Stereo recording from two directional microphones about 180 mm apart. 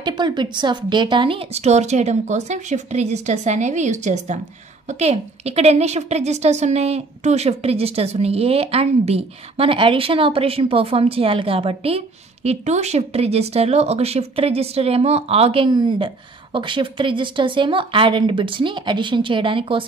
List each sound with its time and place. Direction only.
0.0 s a woman's voice: 25° right (ahead or behind)